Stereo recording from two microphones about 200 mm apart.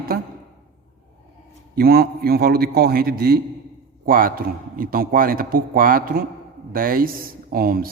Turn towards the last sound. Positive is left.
turn(degrees=-45)  # may be behind; listen again after turning